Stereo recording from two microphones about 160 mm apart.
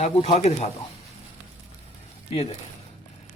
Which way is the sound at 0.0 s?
45° left (ahead or behind).